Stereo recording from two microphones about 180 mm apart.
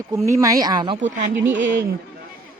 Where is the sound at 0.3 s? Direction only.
20° right (ahead or behind).